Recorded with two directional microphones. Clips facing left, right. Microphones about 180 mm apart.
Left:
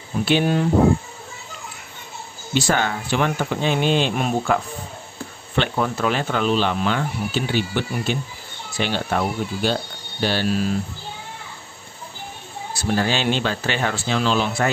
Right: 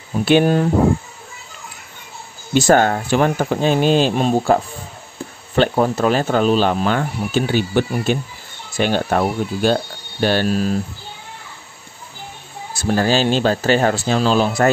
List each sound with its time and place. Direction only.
0.2 s speech: 50° right (ahead or behind)
2.5 s speech: 45° right (ahead or behind)
12.7 s speech: 45° right (ahead or behind)